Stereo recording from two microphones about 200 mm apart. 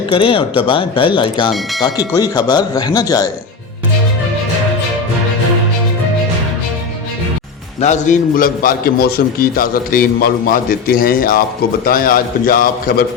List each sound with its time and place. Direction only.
0.1 s speech: 25° left (ahead or behind)
7.8 s a man's voice: 40° left (ahead or behind)